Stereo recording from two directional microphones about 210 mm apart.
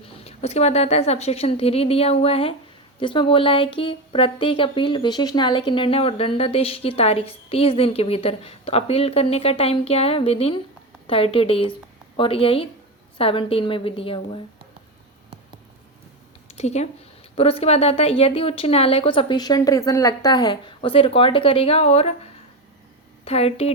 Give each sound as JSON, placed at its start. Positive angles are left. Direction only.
{"t": 0.3, "sound": "a woman's voice", "side_deg": 30}
{"t": 16.5, "sound": "a woman's voice", "side_deg": 30}
{"t": 23.2, "sound": "a woman's voice", "side_deg": 30}